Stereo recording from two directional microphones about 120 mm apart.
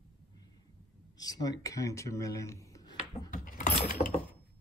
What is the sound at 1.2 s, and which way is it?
Speech, 30° left (ahead or behind).